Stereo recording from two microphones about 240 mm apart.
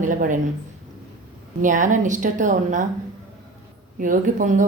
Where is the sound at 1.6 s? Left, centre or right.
Right.